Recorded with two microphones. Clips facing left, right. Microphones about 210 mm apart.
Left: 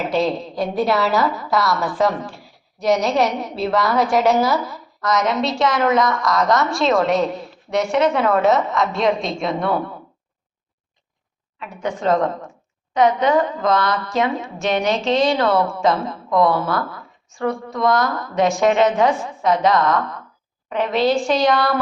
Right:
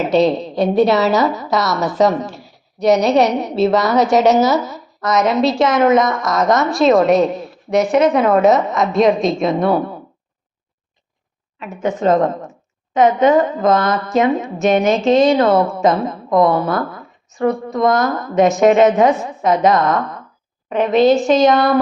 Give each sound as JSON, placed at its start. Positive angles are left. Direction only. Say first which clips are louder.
{"t": 0.0, "sound": "a woman's voice", "louder": "right 6 dB", "side_deg": -25}
{"t": 3.2, "sound": "a woman's voice", "louder": "right 5 dB", "side_deg": -70}
{"t": 3.6, "sound": "a woman's voice", "louder": "right 5 dB", "side_deg": -20}
{"t": 11.8, "sound": "a woman's voice", "louder": "right 4 dB", "side_deg": -20}
{"t": 13.7, "sound": "speech", "louder": "right 5 dB", "side_deg": -45}
{"t": 14.2, "sound": "a woman's voice", "louder": "right 7 dB", "side_deg": -20}
{"t": 14.8, "sound": "speech", "louder": "right 5 dB", "side_deg": -50}
{"t": 15.2, "sound": "a woman's voice", "louder": "right 5 dB", "side_deg": -20}